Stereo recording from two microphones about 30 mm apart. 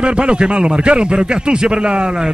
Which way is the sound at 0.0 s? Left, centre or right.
Right.